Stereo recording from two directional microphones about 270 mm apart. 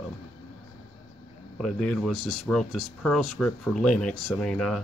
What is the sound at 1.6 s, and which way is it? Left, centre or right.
Speech, centre.